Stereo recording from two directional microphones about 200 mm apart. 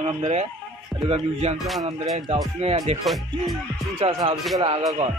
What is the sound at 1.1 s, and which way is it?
Music, 30° right (ahead or behind).